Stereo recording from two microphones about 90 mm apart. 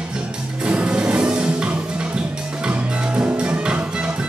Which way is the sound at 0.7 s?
10° right (ahead or behind).